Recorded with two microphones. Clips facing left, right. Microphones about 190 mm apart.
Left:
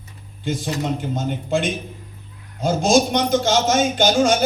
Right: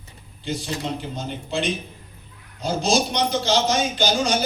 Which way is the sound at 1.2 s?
50° left (ahead or behind).